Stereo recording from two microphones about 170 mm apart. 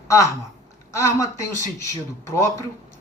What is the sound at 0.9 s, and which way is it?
A man's voice, 15° left (ahead or behind).